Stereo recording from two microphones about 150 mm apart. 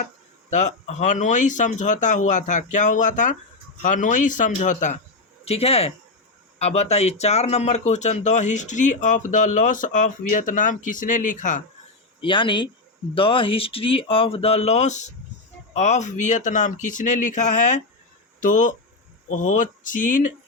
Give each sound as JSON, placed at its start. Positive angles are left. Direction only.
{"t": 0.5, "sound": "speech", "side_deg": 50}
{"t": 5.5, "sound": "speech", "side_deg": 40}
{"t": 12.2, "sound": "speech", "side_deg": 35}